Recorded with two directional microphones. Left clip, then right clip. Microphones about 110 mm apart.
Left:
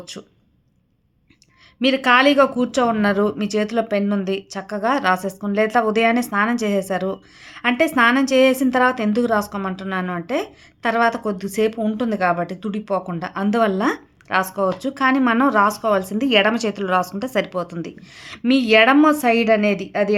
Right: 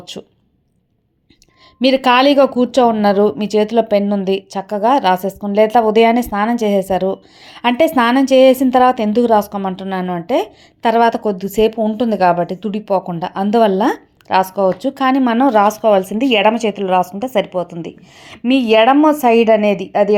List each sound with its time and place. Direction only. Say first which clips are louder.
1.8 s speech: right 4 dB; 45° right (ahead or behind); by 20.1 s 25° right (ahead or behind)